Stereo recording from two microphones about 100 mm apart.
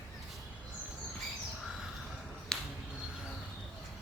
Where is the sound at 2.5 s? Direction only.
5° left (ahead or behind).